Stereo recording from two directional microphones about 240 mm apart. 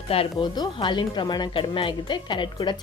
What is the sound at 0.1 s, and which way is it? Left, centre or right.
A woman's voice, left.